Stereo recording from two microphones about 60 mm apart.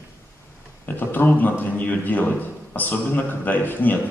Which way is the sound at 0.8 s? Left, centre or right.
Left.